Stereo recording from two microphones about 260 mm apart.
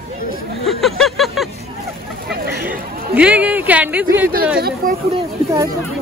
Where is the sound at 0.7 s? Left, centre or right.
Centre.